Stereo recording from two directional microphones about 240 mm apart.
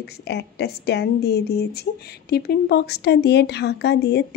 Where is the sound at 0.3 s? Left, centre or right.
Left.